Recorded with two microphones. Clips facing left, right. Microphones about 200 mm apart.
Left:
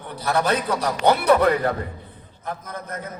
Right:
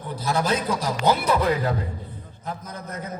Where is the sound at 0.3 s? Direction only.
65° left (ahead or behind).